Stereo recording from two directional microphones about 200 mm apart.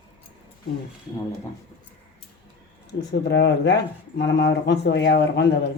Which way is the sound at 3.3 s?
55° left (ahead or behind).